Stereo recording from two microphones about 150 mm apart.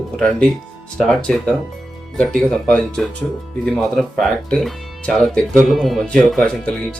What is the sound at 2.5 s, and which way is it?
Speech, 5° left (ahead or behind).